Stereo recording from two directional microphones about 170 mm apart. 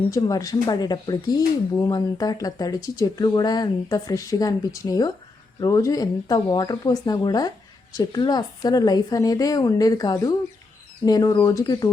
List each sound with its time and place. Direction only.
0.1 s speech: 20° left (ahead or behind)